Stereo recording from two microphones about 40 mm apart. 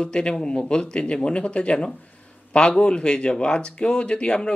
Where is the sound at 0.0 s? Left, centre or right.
Left.